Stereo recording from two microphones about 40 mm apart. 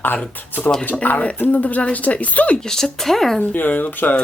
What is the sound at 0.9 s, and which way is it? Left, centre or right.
Speech, left.